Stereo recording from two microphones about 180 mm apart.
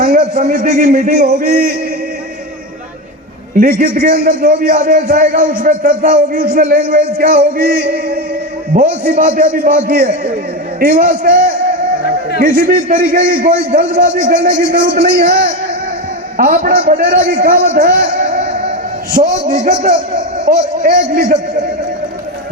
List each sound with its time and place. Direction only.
0.0 s a man's voice: 45° right (ahead or behind)
3.5 s a man's voice: 50° right (ahead or behind)